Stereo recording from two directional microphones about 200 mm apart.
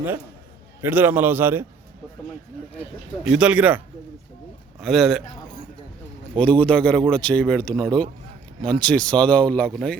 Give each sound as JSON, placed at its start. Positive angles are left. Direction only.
{"t": 0.8, "sound": "a man's voice", "side_deg": -10}
{"t": 3.2, "sound": "a man's voice", "side_deg": -5}
{"t": 6.4, "sound": "speech", "side_deg": 5}